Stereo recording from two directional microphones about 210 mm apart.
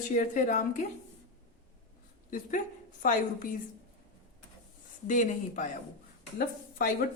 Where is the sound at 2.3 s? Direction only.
40° left (ahead or behind).